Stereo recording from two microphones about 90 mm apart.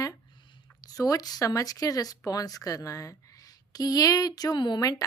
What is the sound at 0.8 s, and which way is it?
Speech, 45° left (ahead or behind).